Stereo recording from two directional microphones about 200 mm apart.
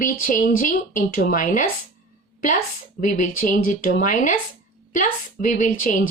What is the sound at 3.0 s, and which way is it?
Speech, 40° left (ahead or behind).